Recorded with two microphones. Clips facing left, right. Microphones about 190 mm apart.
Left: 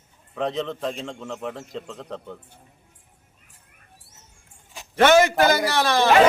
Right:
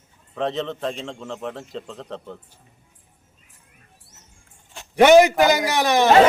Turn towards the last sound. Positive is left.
turn(degrees=-15)  # may be behind; listen again after turning